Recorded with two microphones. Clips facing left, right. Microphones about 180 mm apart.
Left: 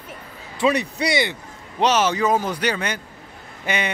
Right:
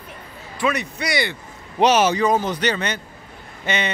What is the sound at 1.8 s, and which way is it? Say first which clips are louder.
Speech: right 3 dB; 10° right (ahead or behind).